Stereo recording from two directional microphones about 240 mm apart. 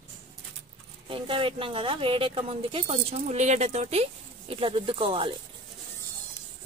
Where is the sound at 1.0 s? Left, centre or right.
Right.